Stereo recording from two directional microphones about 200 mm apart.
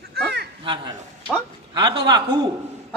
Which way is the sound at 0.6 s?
25° right (ahead or behind).